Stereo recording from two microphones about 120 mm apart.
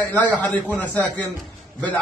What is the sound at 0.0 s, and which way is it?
A man's voice, 10° left (ahead or behind).